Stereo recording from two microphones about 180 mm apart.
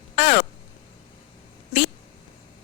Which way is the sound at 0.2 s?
40° left (ahead or behind).